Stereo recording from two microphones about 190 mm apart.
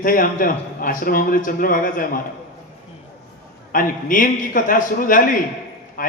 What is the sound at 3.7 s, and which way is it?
A man's voice, 45° left (ahead or behind).